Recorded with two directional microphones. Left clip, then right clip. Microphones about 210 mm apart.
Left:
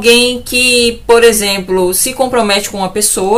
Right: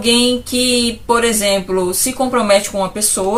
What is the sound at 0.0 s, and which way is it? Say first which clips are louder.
Speech: left 6 dB; 50° left (ahead or behind).